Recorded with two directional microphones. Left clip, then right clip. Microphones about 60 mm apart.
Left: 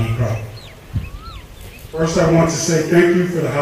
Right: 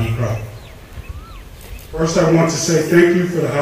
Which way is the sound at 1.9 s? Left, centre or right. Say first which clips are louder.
Right 1 dB; right.